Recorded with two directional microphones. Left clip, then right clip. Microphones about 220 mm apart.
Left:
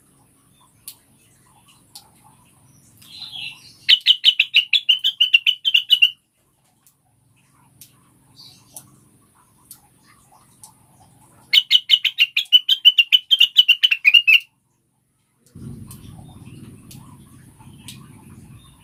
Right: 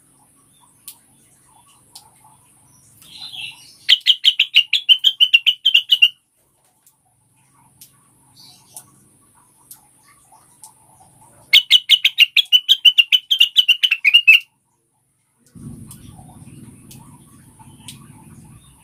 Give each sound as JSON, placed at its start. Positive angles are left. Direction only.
{"t": 3.8, "sound": "bird", "side_deg": -10}
{"t": 11.5, "sound": "bird", "side_deg": -25}